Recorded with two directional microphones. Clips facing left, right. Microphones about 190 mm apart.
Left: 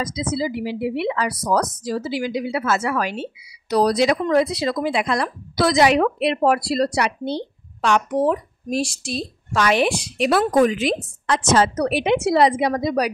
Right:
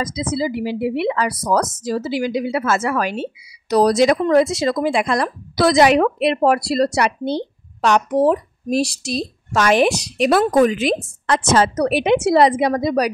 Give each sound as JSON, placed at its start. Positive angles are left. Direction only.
{"t": 0.0, "sound": "a woman's voice", "side_deg": -50}